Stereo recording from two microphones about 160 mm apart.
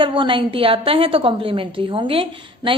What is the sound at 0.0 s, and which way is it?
A woman's voice, 30° right (ahead or behind).